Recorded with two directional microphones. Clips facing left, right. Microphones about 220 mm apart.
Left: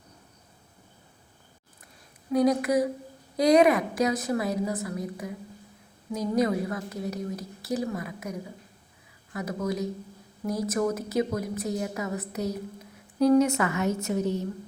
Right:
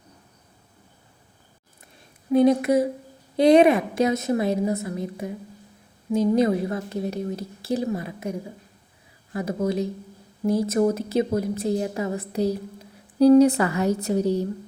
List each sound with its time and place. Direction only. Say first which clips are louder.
2.3 s a woman's voice: right 5 dB; 25° right (ahead or behind)